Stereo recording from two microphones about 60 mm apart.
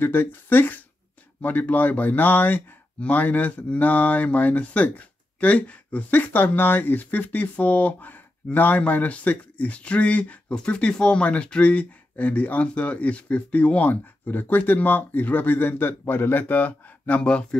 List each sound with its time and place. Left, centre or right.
0.0 s speech: left
17.2 s speech: centre